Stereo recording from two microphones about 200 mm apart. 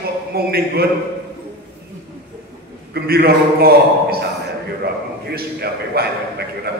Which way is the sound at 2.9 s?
50° right (ahead or behind).